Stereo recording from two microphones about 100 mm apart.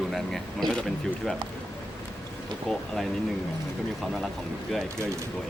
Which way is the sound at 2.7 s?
5° left (ahead or behind).